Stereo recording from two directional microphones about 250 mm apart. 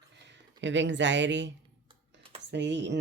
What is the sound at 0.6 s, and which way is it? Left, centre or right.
Speech, right.